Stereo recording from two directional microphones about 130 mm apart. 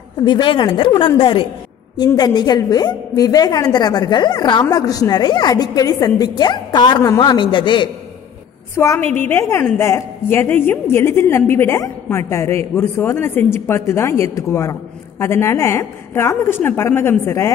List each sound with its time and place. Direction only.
0.2 s a woman's voice: 40° left (ahead or behind)
8.7 s a woman's voice: 20° left (ahead or behind)